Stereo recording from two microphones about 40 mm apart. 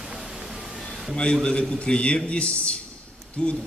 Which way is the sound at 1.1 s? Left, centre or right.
Left.